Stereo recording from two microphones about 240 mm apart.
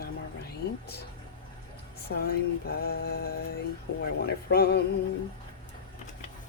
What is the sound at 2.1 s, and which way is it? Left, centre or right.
Speech, left.